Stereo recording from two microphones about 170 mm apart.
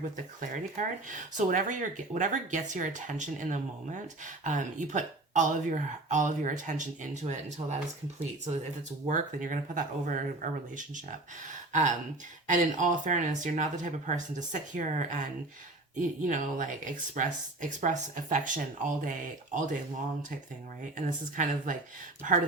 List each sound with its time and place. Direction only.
0.3 s speech: 50° right (ahead or behind)
9.0 s speech: 45° right (ahead or behind)
20.9 s speech: 50° right (ahead or behind)